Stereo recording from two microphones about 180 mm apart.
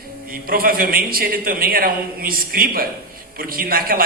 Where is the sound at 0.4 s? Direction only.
55° right (ahead or behind).